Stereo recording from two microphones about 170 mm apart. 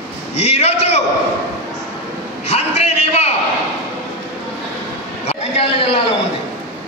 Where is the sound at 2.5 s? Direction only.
40° left (ahead or behind).